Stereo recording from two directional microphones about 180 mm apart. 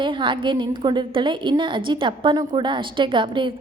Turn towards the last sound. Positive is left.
turn(degrees=-25)  # may be behind; listen again after turning